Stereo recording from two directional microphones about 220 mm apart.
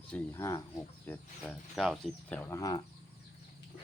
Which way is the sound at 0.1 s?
10° left (ahead or behind).